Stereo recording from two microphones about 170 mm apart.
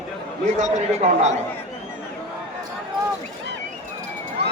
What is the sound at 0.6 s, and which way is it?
Speech, 40° right (ahead or behind).